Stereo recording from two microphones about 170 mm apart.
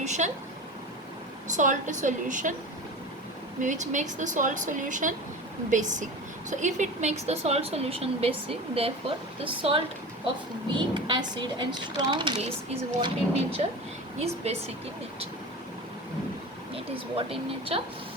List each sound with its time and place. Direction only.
0.0 s speech: 45° right (ahead or behind)
1.5 s speech: 45° right (ahead or behind)
3.6 s a woman's voice: 45° right (ahead or behind)
16.7 s a woman's voice: 35° right (ahead or behind)